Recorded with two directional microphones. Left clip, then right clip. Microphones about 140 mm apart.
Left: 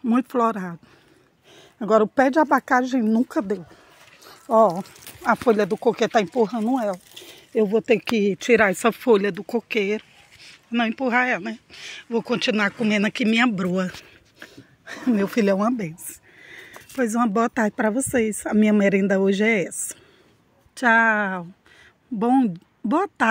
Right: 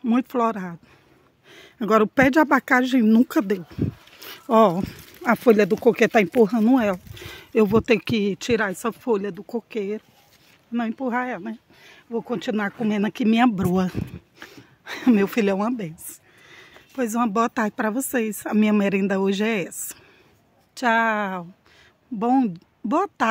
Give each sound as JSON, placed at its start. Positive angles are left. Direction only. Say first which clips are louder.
{"t": 0.0, "sound": "speech", "louder": "left 1 dB", "side_deg": 0}
{"t": 1.5, "sound": "speech", "louder": "left 1 dB", "side_deg": -25}
{"t": 6.5, "sound": "speech", "louder": "right 4 dB", "side_deg": -90}
{"t": 7.2, "sound": "speech", "louder": "right 2 dB", "side_deg": -40}
{"t": 8.1, "sound": "speech", "louder": "left 4 dB", "side_deg": -5}
{"t": 8.8, "sound": "speech", "louder": "left 6 dB", "side_deg": 20}
{"t": 10.7, "sound": "speech", "louder": "left 4 dB", "side_deg": 0}
{"t": 12.3, "sound": "speech", "louder": "left 5 dB", "side_deg": -15}
{"t": 13.6, "sound": "speech", "louder": "right 1 dB", "side_deg": -40}
{"t": 14.4, "sound": "a sound", "louder": "even", "side_deg": -25}
{"t": 15.2, "sound": "speech", "louder": "left 2 dB", "side_deg": 0}